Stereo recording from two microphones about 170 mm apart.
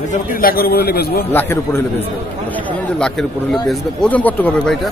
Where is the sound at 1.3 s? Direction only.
15° left (ahead or behind).